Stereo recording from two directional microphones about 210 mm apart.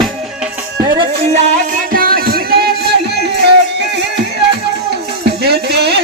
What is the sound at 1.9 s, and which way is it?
Music, 45° right (ahead or behind).